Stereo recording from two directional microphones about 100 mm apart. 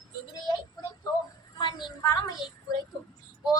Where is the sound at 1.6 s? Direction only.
50° left (ahead or behind).